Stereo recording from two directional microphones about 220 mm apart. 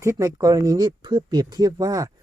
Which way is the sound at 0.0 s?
15° right (ahead or behind).